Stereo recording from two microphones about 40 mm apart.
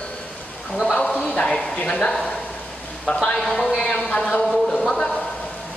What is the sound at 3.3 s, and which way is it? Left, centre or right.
Speech, centre.